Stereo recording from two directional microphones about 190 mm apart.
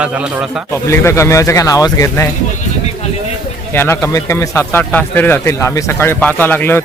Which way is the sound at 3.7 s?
10° left (ahead or behind).